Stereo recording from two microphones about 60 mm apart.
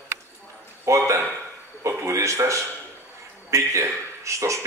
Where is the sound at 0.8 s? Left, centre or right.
Right.